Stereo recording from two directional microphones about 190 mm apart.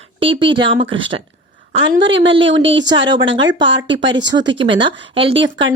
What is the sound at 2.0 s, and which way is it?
Speech, 70° right (ahead or behind).